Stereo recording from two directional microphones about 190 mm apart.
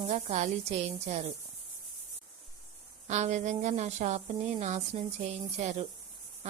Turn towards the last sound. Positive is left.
turn(degrees=-35)  # may be behind; listen again after turning